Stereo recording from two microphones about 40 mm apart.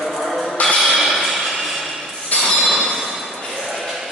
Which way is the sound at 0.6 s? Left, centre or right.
Left.